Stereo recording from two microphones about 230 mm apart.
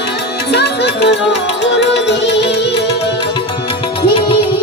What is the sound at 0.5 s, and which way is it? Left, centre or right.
Music, left.